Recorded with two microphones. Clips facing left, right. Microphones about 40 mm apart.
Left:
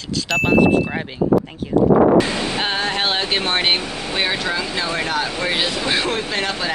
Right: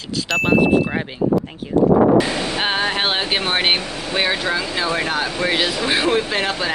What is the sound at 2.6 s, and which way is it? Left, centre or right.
Speech, centre.